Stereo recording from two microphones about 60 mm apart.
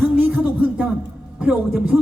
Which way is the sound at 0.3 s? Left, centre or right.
Right.